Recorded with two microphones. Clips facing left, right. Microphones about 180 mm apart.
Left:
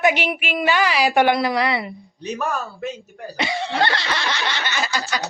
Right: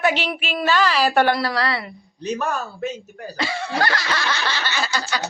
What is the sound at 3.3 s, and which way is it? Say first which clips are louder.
Speech: left 2 dB; 20° left (ahead or behind).